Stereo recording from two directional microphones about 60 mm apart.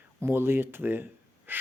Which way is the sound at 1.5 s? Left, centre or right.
Right.